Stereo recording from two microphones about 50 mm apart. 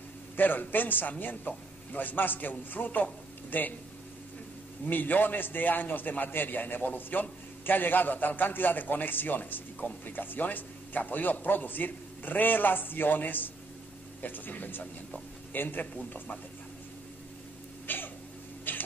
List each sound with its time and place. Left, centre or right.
0.4 s a man's voice: left
4.8 s a man's voice: left
17.8 s a sound: left